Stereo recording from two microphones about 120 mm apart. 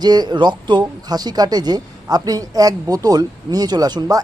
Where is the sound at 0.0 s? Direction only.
35° right (ahead or behind).